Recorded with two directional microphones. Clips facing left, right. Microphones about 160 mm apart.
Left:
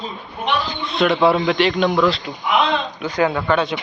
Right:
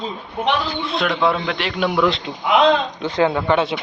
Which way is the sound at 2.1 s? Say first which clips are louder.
Right 1 dB; 20° right (ahead or behind).